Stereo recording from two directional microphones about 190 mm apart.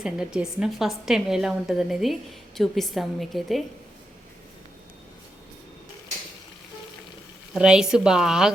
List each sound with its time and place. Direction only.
0.0 s a woman's voice: 5° right (ahead or behind)
7.5 s a woman's voice: 5° right (ahead or behind)